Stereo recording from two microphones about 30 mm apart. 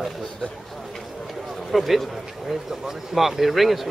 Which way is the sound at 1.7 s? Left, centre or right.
Centre.